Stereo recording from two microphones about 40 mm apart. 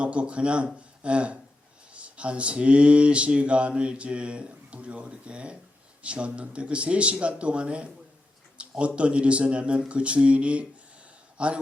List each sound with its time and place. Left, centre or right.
0.0 s speech: right
8.6 s a sound: right
9.0 s a man's voice: right